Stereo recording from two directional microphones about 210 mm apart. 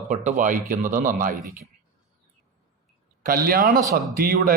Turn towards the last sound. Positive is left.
turn(degrees=-45)  # may be behind; listen again after turning